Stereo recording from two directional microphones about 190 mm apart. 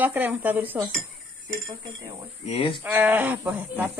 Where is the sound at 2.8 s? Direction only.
10° right (ahead or behind).